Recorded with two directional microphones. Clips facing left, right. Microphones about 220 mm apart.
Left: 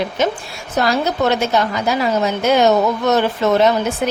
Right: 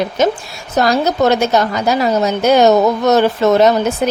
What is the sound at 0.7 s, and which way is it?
A woman's voice, 40° right (ahead or behind).